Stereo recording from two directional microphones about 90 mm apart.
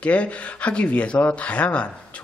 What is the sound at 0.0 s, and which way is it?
A man's voice, 15° left (ahead or behind).